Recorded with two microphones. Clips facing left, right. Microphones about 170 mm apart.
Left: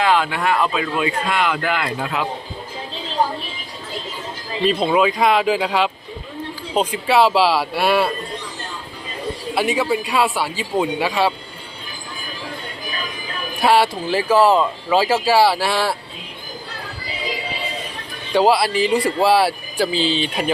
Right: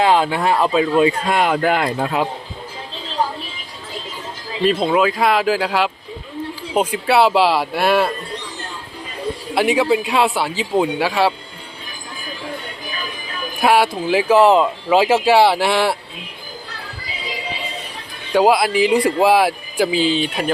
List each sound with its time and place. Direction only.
0.0 s speech: 30° right (ahead or behind)
4.6 s speech: centre (ahead or behind)
7.8 s a man's voice: 10° left (ahead or behind)
9.6 s speech: 15° right (ahead or behind)
13.6 s speech: 10° right (ahead or behind)
18.3 s speech: 15° right (ahead or behind)